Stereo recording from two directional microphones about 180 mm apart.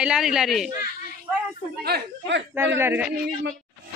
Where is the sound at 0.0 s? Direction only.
5° right (ahead or behind).